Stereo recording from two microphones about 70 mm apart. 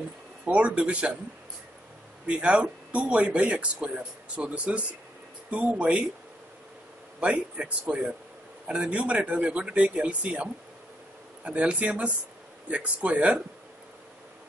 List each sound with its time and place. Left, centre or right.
0.5 s speech: centre
2.2 s speech: centre
7.2 s speech: centre